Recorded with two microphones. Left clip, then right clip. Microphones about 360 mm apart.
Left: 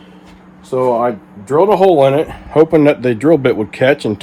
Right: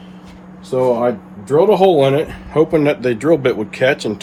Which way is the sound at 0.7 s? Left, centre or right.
Centre.